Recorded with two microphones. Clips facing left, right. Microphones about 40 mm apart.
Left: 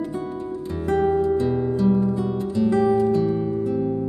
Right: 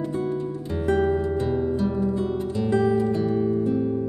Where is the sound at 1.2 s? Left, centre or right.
Right.